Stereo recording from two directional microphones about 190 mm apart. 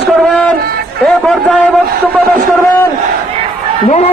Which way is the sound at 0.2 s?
Centre (ahead or behind).